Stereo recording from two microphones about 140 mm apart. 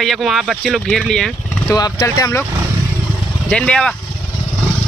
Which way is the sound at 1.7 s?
25° left (ahead or behind).